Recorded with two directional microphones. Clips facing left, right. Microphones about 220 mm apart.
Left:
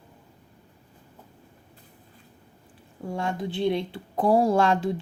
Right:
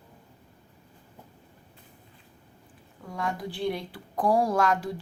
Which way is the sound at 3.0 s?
30° left (ahead or behind).